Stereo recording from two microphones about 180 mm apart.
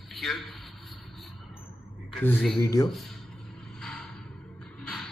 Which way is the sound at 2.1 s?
5° left (ahead or behind).